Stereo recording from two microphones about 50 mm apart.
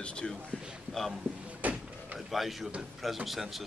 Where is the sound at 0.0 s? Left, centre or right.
Centre.